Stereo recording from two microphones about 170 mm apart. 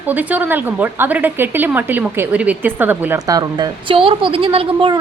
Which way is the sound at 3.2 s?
20° right (ahead or behind).